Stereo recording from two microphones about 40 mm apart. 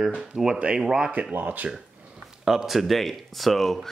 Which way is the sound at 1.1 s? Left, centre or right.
Right.